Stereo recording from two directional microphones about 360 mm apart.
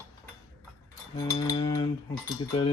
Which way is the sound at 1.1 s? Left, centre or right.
Centre.